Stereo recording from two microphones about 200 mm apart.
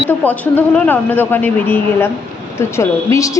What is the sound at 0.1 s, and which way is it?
A woman's voice, 10° left (ahead or behind).